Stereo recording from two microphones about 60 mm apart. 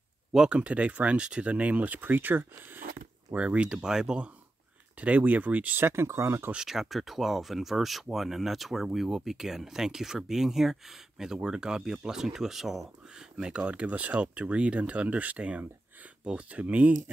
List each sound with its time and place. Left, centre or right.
0.3 s speech: centre
0.6 s speech: right
3.3 s speech: centre
5.0 s speech: right
5.8 s speech: right
6.5 s speech: centre
13.4 s speech: centre